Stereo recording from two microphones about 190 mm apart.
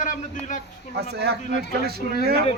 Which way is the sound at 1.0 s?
60° right (ahead or behind).